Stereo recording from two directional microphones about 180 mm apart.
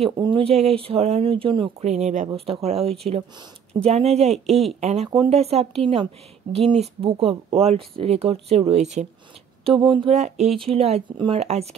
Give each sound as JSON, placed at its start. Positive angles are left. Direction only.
{"t": 0.0, "sound": "speech", "side_deg": -30}
{"t": 6.8, "sound": "speech", "side_deg": -30}
{"t": 9.7, "sound": "speech", "side_deg": -25}
{"t": 10.1, "sound": "speech", "side_deg": -40}